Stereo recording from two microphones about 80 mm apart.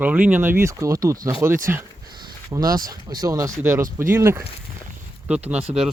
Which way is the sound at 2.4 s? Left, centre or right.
Right.